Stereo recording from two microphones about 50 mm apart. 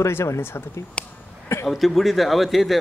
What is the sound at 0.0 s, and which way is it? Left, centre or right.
Speech, left.